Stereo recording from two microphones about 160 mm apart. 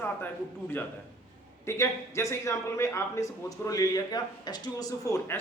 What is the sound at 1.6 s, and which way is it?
A man's voice, 20° left (ahead or behind).